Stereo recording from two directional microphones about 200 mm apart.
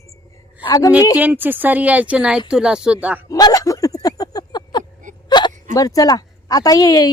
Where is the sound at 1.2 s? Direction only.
10° right (ahead or behind).